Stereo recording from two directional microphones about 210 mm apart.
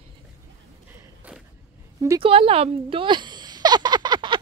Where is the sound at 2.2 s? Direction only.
25° right (ahead or behind).